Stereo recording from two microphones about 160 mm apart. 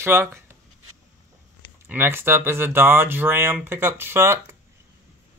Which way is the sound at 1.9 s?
15° right (ahead or behind).